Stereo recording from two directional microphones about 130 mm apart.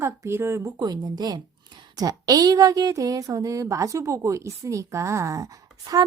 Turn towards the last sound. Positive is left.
turn(degrees=-25)  # may be behind; listen again after turning